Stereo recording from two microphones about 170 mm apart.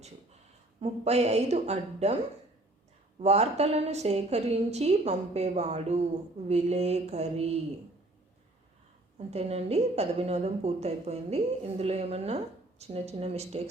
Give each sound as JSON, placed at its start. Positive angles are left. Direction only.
{"t": 0.8, "sound": "a woman's voice", "side_deg": -40}
{"t": 3.2, "sound": "a woman's voice", "side_deg": -40}
{"t": 9.1, "sound": "a woman's voice", "side_deg": -35}